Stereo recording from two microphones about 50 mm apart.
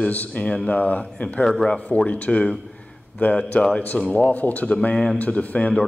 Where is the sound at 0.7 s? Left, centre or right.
Left.